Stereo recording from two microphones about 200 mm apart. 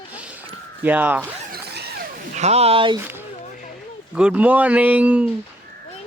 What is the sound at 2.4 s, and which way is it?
Speech, 30° right (ahead or behind).